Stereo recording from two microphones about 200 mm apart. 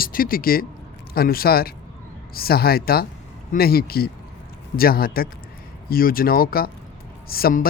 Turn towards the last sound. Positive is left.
turn(degrees=50)  # may be behind; listen again after turning